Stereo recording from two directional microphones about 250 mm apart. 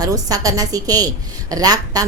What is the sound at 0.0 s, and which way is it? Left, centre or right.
A woman's voice, centre.